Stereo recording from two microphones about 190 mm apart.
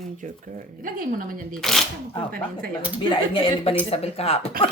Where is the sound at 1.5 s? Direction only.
Centre (ahead or behind).